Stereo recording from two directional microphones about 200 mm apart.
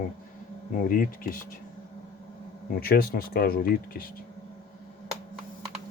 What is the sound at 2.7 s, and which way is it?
Speech, 50° left (ahead or behind).